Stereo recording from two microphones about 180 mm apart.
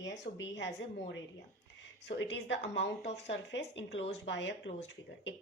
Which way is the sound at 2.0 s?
70° left (ahead or behind).